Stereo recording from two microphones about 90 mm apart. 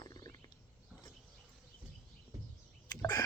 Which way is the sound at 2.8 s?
45° left (ahead or behind).